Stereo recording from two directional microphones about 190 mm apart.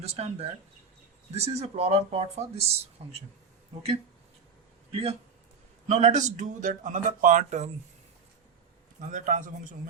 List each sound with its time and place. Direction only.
0.0 s speech: 30° right (ahead or behind)
4.9 s speech: 30° right (ahead or behind)
9.0 s speech: 40° right (ahead or behind)